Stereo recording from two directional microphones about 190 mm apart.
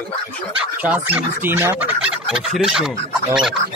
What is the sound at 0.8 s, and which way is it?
Speech, 10° right (ahead or behind).